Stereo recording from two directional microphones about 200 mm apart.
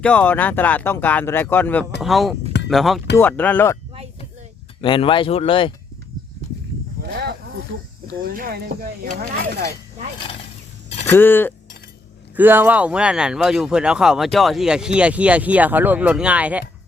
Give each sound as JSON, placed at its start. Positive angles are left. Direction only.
{"t": 0.0, "sound": "speech", "side_deg": 5}
{"t": 4.8, "sound": "speech", "side_deg": 25}
{"t": 7.0, "sound": "snake", "side_deg": -55}
{"t": 8.2, "sound": "speech", "side_deg": -45}
{"t": 11.0, "sound": "a sound", "side_deg": 10}
{"t": 12.4, "sound": "speech", "side_deg": -10}